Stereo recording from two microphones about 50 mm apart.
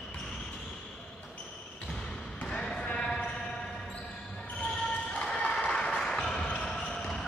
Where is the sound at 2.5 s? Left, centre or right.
Centre.